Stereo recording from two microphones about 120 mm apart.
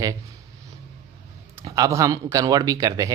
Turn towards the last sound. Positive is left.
turn(degrees=-30)  # may be behind; listen again after turning